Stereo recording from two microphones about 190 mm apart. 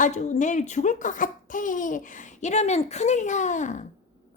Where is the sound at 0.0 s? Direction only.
40° left (ahead or behind).